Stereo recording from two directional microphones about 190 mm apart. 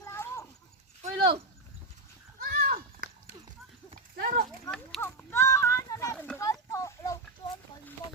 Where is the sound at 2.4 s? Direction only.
50° right (ahead or behind).